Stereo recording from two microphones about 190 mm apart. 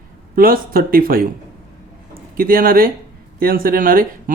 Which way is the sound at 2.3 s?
50° right (ahead or behind).